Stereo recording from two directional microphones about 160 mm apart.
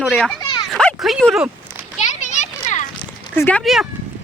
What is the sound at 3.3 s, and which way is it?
Speech, 10° left (ahead or behind).